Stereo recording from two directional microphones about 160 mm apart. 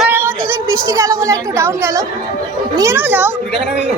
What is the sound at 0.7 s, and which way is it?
A woman's voice, 20° right (ahead or behind).